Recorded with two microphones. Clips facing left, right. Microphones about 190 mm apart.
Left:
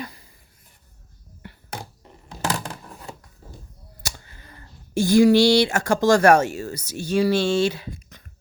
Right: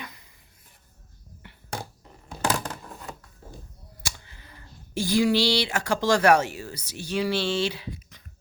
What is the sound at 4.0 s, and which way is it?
Speech, 45° left (ahead or behind).